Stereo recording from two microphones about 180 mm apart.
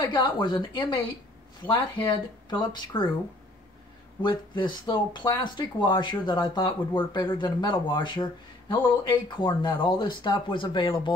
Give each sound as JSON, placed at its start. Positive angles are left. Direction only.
{"t": 0.0, "sound": "speech", "side_deg": 25}
{"t": 2.7, "sound": "speech", "side_deg": 25}
{"t": 4.2, "sound": "speech", "side_deg": 25}